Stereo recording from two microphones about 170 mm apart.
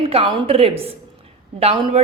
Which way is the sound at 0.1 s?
35° right (ahead or behind).